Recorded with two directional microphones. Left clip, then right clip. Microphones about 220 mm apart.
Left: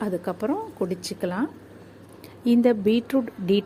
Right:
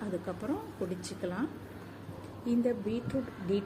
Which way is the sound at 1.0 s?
30° left (ahead or behind).